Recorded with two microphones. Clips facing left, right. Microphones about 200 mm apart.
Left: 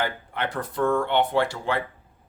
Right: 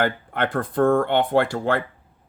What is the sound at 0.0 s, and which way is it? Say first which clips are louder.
Speech: right 5 dB; 55° right (ahead or behind).